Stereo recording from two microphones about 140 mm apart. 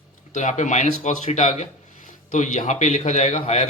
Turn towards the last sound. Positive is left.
turn(degrees=60)  # may be behind; listen again after turning